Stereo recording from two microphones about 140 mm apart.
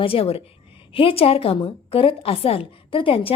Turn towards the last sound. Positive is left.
turn(degrees=40)  # may be behind; listen again after turning